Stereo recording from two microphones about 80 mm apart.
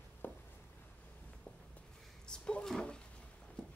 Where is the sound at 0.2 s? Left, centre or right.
Left.